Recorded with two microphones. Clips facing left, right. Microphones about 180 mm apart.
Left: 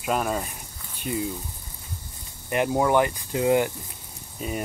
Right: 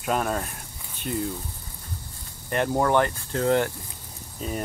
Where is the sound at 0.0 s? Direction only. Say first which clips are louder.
Even; centre (ahead or behind).